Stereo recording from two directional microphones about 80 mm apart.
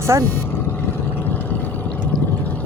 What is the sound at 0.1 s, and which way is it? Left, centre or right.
Speech, right.